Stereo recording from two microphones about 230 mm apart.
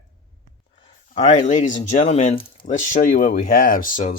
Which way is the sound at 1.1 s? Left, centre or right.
Left.